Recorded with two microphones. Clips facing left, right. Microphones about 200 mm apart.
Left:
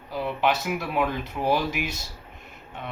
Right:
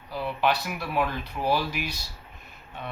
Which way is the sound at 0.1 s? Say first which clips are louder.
Left 1 dB; 20° left (ahead or behind).